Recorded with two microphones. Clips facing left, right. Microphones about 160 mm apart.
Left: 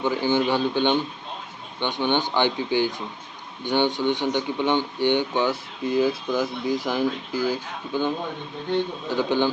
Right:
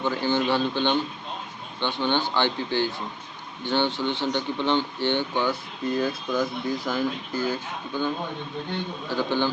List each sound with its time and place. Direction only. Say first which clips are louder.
0.0 s speech: left 2 dB; 15° left (ahead or behind)